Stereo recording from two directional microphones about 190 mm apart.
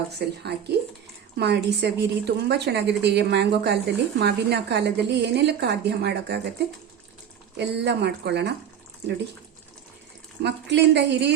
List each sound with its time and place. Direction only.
0.1 s a woman's voice: 60° right (ahead or behind)
7.5 s a woman's voice: 65° right (ahead or behind)
10.4 s a woman's voice: 65° right (ahead or behind)